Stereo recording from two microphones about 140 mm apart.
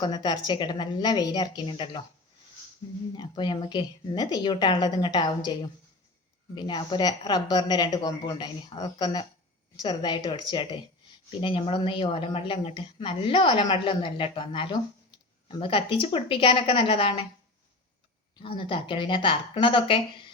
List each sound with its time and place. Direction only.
0.0 s speech: 30° left (ahead or behind)
3.2 s speech: 35° left (ahead or behind)
18.4 s speech: 40° left (ahead or behind)